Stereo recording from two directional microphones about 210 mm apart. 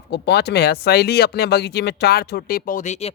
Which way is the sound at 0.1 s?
50° left (ahead or behind).